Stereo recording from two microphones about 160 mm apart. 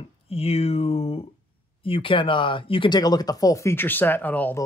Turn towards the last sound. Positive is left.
turn(degrees=10)  # may be behind; listen again after turning